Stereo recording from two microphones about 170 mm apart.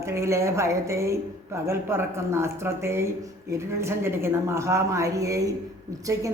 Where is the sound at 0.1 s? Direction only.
15° right (ahead or behind).